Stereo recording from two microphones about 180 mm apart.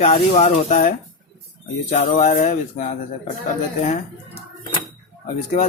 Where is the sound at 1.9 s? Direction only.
40° left (ahead or behind).